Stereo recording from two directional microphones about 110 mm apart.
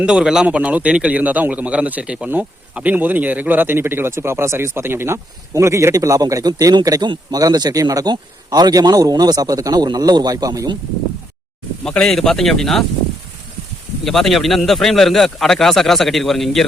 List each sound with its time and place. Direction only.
0.0 s a man's voice: 5° right (ahead or behind); by 10.8 s 35° right (ahead or behind)
11.8 s speech: 5° left (ahead or behind)
14.0 s speech: centre (ahead or behind)